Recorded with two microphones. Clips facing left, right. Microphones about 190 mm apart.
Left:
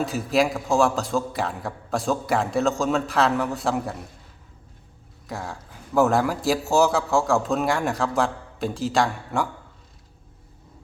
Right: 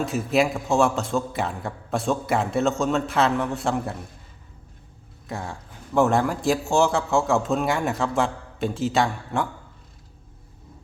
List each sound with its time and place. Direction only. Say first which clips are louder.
0.0 s a man's voice: even; centre (ahead or behind)
5.3 s a man's voice: even; centre (ahead or behind)